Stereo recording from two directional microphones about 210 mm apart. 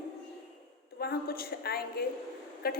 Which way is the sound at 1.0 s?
50° left (ahead or behind).